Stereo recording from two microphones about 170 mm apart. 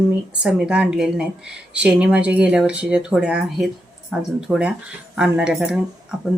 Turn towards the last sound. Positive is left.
turn(degrees=-5)  # may be behind; listen again after turning